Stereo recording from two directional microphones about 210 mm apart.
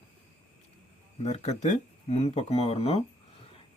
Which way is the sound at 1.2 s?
30° left (ahead or behind).